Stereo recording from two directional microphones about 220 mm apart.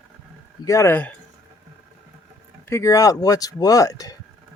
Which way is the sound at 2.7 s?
15° left (ahead or behind).